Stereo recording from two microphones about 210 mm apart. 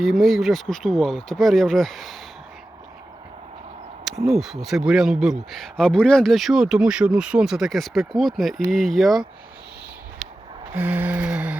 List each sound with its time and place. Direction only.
0.0 s speech: centre (ahead or behind)
4.3 s speech: centre (ahead or behind)
10.8 s lullaby: 5° right (ahead or behind)